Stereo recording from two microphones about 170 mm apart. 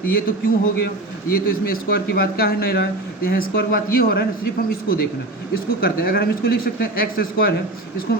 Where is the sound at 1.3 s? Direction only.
60° left (ahead or behind).